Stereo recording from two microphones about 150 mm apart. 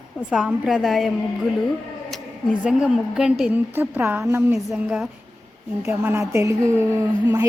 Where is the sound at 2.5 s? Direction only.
10° right (ahead or behind).